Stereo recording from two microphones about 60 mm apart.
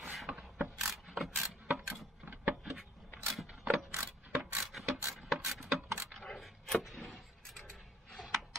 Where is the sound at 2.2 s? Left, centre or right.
Right.